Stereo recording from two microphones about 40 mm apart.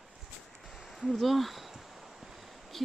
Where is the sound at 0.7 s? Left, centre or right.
Centre.